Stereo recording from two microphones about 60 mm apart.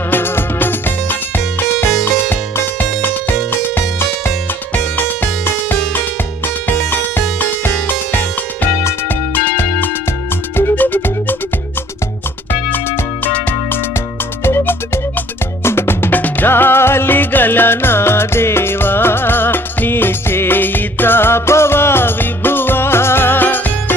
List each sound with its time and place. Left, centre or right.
0.1 s music: left
1.9 s music: centre
2.3 s music: left
13.2 s music: left